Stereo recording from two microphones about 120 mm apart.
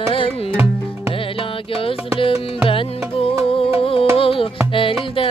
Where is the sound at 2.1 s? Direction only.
45° left (ahead or behind).